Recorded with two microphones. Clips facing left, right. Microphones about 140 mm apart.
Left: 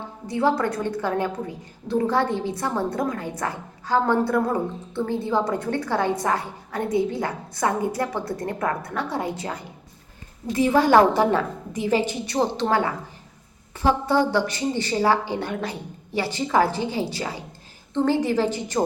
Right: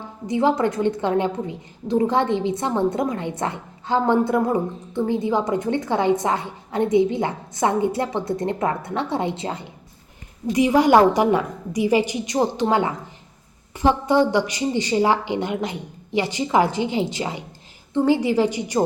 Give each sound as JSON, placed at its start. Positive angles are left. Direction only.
{"t": 0.3, "sound": "a woman's voice", "side_deg": -20}